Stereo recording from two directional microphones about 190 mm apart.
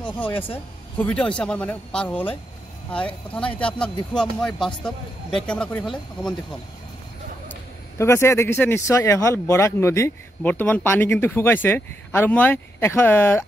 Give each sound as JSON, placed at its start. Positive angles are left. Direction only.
{"t": 0.0, "sound": "a sound", "side_deg": 10}
{"t": 0.3, "sound": "speech", "side_deg": 30}
{"t": 0.9, "sound": "speech", "side_deg": 5}
{"t": 8.0, "sound": "speech", "side_deg": 15}